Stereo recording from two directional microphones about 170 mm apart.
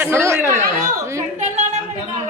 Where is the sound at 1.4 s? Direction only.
45° right (ahead or behind).